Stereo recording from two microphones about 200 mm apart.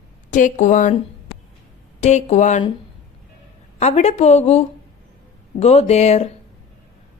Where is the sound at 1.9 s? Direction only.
35° left (ahead or behind).